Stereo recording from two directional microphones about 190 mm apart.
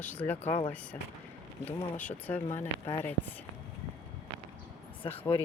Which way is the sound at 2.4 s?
35° left (ahead or behind).